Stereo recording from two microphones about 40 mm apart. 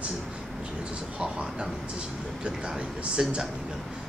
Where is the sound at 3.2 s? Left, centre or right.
Centre.